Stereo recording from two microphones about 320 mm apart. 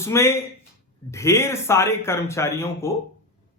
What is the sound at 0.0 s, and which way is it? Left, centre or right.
Speech, centre.